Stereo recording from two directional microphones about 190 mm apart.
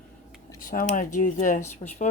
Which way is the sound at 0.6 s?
45° left (ahead or behind).